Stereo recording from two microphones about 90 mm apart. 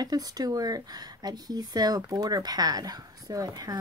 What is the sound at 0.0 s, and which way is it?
Speech, 45° right (ahead or behind).